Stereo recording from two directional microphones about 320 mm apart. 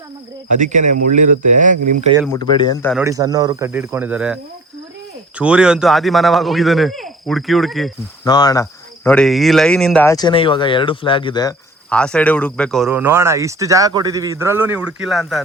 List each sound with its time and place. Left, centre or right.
0.5 s speech: right
2.2 s speech: centre
2.9 s speech: centre
5.4 s speech: centre
8.2 s speech: centre